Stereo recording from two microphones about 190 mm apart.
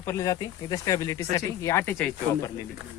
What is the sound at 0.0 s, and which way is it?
Speech, 15° left (ahead or behind).